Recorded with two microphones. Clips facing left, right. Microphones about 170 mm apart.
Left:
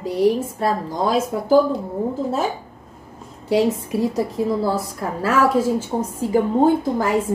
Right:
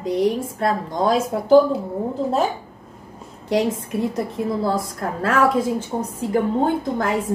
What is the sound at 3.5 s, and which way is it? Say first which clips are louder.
A woman's voice: left 2 dB; 10° left (ahead or behind).